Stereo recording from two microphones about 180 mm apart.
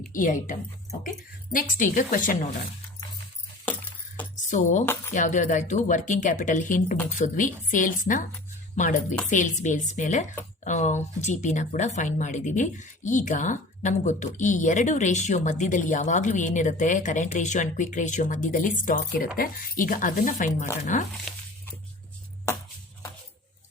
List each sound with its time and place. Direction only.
0.1 s speech: 45° left (ahead or behind)
1.5 s speech: 45° left (ahead or behind)
4.4 s speech: 45° left (ahead or behind)